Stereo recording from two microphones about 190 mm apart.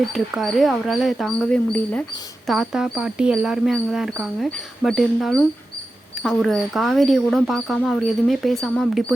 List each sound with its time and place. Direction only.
0.0 s speech: centre (ahead or behind)
2.5 s speech: 5° right (ahead or behind)